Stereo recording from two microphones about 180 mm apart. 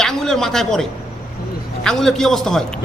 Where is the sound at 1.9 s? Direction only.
Centre (ahead or behind).